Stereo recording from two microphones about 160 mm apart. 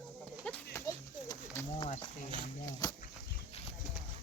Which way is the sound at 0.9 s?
20° left (ahead or behind).